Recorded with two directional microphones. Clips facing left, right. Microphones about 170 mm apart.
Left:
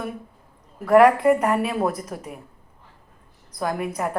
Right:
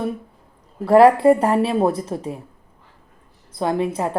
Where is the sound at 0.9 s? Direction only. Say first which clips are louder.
Right 3 dB; 30° right (ahead or behind).